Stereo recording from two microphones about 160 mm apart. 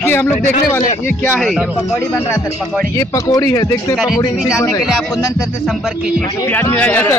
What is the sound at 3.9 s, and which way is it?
Speech, centre (ahead or behind).